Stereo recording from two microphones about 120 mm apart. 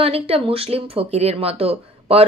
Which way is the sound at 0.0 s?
55° right (ahead or behind).